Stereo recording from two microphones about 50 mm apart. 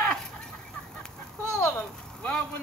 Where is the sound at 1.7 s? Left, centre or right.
Centre.